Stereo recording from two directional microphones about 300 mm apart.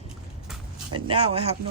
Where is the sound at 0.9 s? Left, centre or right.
Centre.